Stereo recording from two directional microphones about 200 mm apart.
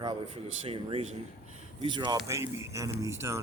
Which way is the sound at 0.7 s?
25° right (ahead or behind).